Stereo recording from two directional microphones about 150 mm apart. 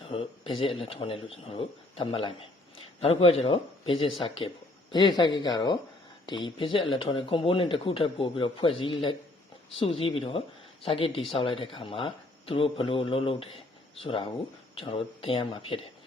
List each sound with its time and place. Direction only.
0.0 s speech: 40° left (ahead or behind)